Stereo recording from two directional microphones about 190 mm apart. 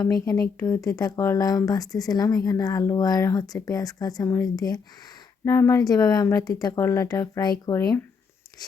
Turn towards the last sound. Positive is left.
turn(degrees=20)  # may be behind; listen again after turning